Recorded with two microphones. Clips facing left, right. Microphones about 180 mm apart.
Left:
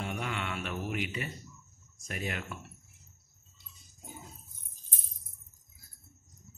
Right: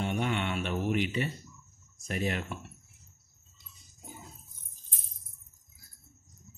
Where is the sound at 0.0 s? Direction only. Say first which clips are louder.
Right 5 dB; 25° right (ahead or behind).